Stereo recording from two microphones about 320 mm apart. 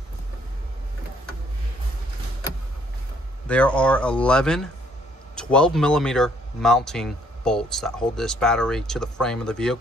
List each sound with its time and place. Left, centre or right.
3.4 s speech: centre